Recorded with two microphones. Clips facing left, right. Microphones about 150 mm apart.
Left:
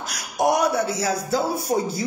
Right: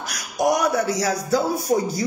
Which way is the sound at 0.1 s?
30° left (ahead or behind).